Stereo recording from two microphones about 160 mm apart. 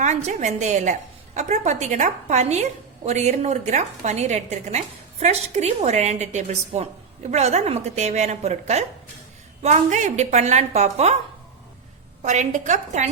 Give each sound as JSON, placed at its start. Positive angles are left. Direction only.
{"t": 0.0, "sound": "a woman's voice", "side_deg": -50}
{"t": 12.2, "sound": "a woman's voice", "side_deg": -50}